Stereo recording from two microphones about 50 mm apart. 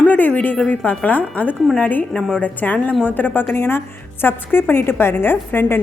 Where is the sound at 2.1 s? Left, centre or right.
Centre.